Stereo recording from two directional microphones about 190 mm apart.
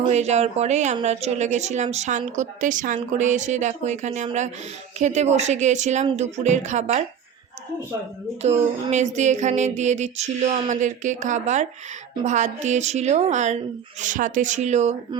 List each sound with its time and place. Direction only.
0.1 s speech: 35° right (ahead or behind)
8.4 s speech: 35° right (ahead or behind)